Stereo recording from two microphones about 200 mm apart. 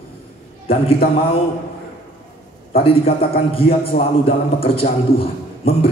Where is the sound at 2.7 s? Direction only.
30° left (ahead or behind).